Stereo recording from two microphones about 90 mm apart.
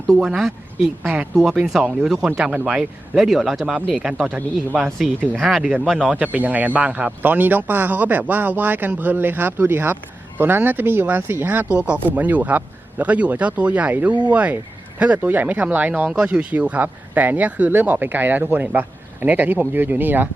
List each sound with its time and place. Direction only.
0.3 s speech: 5° right (ahead or behind)
5.4 s speech: centre (ahead or behind)
6.1 s speech: 15° right (ahead or behind)